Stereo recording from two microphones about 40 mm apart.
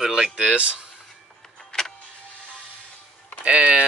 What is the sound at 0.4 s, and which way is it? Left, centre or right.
Speech, right.